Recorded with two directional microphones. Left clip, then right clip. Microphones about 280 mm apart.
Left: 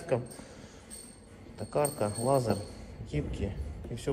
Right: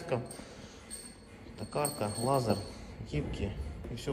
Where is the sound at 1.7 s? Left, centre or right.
Centre.